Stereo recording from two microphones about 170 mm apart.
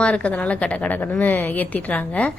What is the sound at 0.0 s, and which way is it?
A woman's voice, 5° left (ahead or behind).